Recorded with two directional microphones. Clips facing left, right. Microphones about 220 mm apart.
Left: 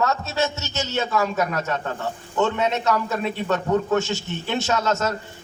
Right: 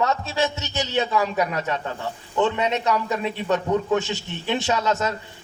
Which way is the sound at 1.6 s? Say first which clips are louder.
Even; 45° left (ahead or behind).